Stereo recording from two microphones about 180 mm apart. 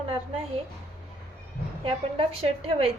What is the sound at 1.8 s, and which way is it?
Speech, 30° right (ahead or behind).